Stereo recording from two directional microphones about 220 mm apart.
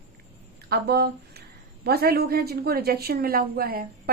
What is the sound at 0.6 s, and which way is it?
A woman's voice, 45° right (ahead or behind).